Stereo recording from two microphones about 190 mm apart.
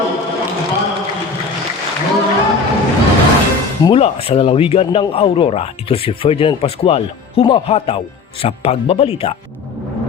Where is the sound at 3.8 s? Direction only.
30° left (ahead or behind).